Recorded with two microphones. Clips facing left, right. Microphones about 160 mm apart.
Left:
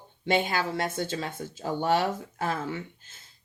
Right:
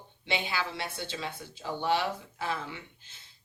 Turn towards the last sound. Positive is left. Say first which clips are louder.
# left 9 dB
turn(degrees=45)  # may be behind; listen again after turning